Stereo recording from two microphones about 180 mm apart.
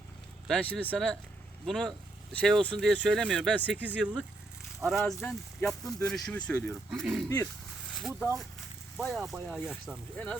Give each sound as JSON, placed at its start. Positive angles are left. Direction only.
{"t": 0.4, "sound": "speech", "side_deg": 5}